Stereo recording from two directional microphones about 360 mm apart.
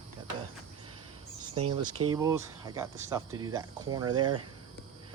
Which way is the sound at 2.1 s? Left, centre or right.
Centre.